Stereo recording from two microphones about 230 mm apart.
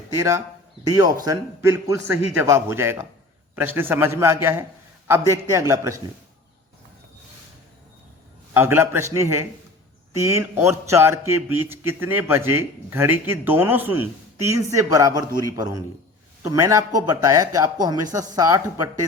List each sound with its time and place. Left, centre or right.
0.2 s speech: centre
8.5 s speech: centre